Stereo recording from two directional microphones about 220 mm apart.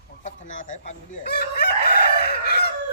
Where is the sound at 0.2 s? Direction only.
35° left (ahead or behind).